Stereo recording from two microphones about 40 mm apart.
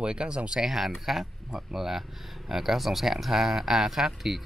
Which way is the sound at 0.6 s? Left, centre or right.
Centre.